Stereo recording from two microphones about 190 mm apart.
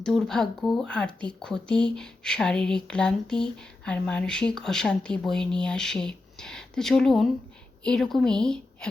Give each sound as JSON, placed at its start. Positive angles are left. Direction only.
{"t": 0.0, "sound": "speech", "side_deg": 5}